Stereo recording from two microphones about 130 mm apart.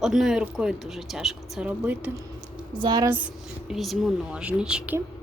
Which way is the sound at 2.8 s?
35° right (ahead or behind).